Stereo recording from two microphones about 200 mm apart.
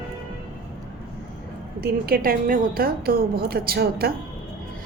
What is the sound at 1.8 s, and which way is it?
A woman's voice, 50° right (ahead or behind).